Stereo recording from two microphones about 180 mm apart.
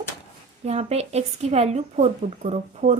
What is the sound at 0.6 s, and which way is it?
Speech, 35° right (ahead or behind).